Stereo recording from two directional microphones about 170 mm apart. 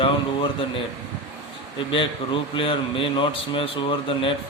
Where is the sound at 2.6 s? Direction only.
30° left (ahead or behind).